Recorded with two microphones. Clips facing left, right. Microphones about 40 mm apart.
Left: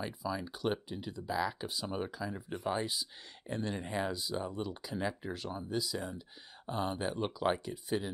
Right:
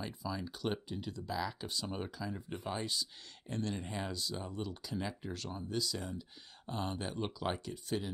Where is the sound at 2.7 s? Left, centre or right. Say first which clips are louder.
Left 4 dB; centre.